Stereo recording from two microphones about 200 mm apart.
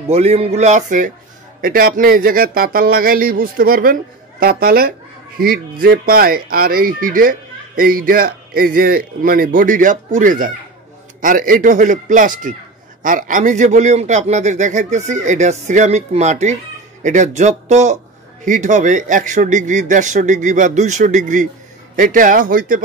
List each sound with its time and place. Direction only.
0.1 s a man's voice: 30° right (ahead or behind)